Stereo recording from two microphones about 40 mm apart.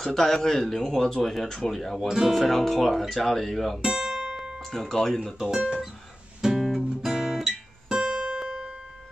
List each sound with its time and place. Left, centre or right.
0.1 s speech: centre
2.0 s speech: centre
2.4 s speech: centre
3.8 s guitar: centre
4.6 s speech: centre
5.5 s speech: right
6.5 s guitar: centre